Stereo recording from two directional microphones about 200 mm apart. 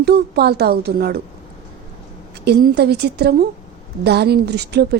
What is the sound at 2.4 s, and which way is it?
A woman's voice, 50° right (ahead or behind).